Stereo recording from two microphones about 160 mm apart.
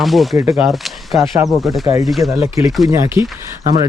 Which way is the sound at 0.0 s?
Centre (ahead or behind).